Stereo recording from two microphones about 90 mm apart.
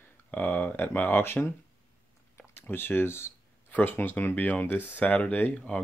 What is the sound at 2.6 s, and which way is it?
Speech, 25° left (ahead or behind).